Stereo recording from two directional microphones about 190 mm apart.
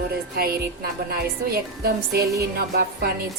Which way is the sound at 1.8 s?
55° right (ahead or behind).